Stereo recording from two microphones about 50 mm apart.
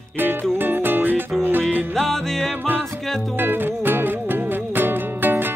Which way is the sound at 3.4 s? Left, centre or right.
Right.